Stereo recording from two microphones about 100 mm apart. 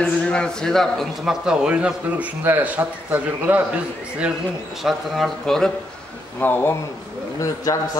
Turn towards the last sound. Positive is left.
turn(degrees=35)  # may be behind; listen again after turning